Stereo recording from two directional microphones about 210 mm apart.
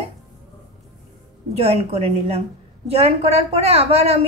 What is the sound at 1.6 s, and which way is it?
A woman's voice, 30° right (ahead or behind).